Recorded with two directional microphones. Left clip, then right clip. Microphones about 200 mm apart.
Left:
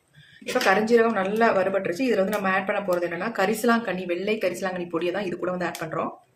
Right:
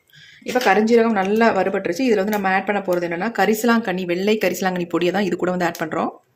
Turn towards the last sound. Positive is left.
turn(degrees=-45)  # may be behind; listen again after turning